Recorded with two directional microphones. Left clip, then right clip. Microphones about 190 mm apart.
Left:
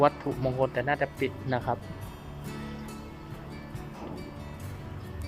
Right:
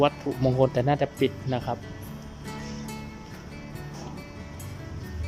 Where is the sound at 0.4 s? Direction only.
20° right (ahead or behind).